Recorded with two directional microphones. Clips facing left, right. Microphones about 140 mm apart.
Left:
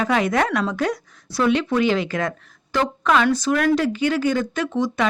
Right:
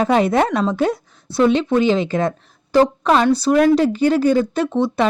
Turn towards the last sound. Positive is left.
turn(degrees=-30)  # may be behind; listen again after turning